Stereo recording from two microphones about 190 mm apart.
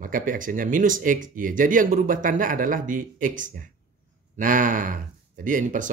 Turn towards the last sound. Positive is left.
turn(degrees=-45)  # may be behind; listen again after turning